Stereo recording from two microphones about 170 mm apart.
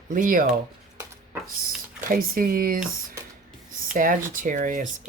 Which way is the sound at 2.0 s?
55° right (ahead or behind).